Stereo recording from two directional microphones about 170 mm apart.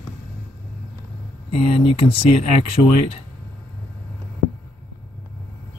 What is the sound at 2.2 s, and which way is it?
Speech, 35° left (ahead or behind).